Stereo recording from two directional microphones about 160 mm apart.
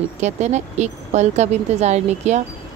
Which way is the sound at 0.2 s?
45° right (ahead or behind).